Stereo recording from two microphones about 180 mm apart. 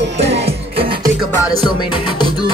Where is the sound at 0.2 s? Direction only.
35° right (ahead or behind).